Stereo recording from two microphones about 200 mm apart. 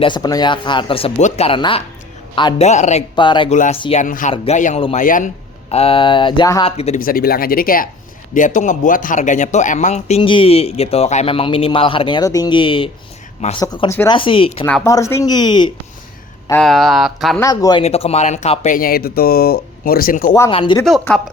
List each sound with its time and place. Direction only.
0.0 s speech: 20° left (ahead or behind)
2.6 s speech: 35° left (ahead or behind)
3.2 s speech: 25° left (ahead or behind)
3.5 s speech: 35° left (ahead or behind)
4.0 s speech: 40° left (ahead or behind); by 6.7 s 20° left (ahead or behind)
6.7 s speech: 30° left (ahead or behind)
7.0 s speech: 45° left (ahead or behind); by 14.1 s 15° left (ahead or behind)
14.1 s speech: 25° left (ahead or behind)
14.6 s speech: 15° left (ahead or behind)
16.5 s speech: 5° left (ahead or behind)
17.4 s speech: 20° left (ahead or behind)
17.8 s speech: 30° left (ahead or behind)
20.5 s speech: 30° left (ahead or behind)
20.8 s speech: centre (ahead or behind)